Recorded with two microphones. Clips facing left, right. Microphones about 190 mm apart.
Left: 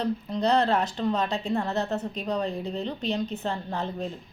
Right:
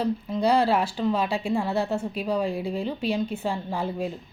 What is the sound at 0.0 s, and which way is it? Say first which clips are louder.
A woman's voice: right 2 dB; 5° right (ahead or behind).